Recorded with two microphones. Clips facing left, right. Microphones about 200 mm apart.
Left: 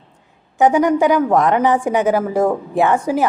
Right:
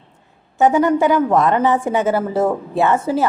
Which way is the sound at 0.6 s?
15° left (ahead or behind).